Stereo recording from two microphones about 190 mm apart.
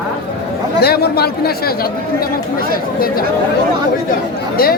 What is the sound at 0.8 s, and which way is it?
Speech, 55° left (ahead or behind).